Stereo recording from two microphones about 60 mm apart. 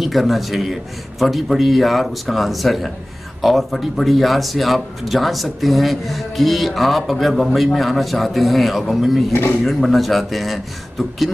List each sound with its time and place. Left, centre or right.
0.0 s speech: centre
9.3 s speech: left
9.7 s speech: centre